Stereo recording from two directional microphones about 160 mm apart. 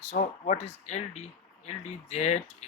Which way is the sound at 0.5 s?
40° left (ahead or behind).